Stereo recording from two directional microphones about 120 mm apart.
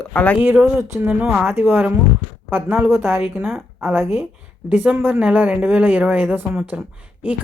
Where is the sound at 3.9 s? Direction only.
20° right (ahead or behind).